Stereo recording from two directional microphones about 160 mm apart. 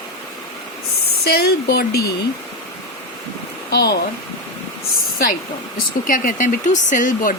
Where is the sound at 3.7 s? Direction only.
90° left.